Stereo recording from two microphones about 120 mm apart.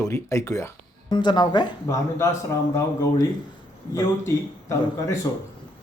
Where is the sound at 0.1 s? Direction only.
25° left (ahead or behind).